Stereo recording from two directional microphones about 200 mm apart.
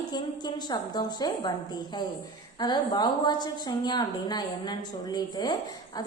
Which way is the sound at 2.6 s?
20° left (ahead or behind).